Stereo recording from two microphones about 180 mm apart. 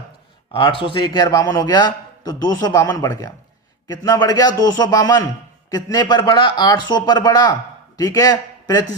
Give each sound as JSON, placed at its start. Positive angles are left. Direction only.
{"t": 0.5, "sound": "a man's voice", "side_deg": 30}